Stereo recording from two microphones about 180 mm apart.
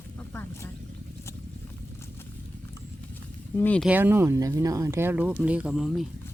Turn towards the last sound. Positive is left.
turn(degrees=0)  # may be behind; listen again after turning